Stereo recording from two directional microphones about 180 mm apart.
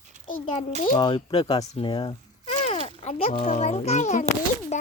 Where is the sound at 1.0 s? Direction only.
30° left (ahead or behind).